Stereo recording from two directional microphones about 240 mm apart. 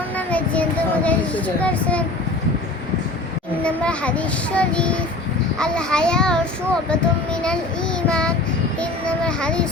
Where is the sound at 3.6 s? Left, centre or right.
Centre.